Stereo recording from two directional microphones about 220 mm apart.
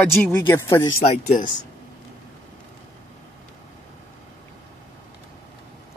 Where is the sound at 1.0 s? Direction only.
35° left (ahead or behind).